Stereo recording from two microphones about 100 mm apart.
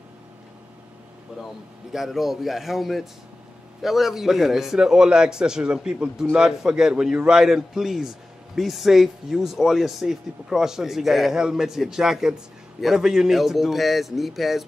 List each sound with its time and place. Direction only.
1.4 s a man's voice: centre (ahead or behind)